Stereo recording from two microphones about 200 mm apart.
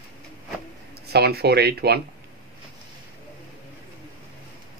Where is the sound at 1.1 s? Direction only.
55° right (ahead or behind).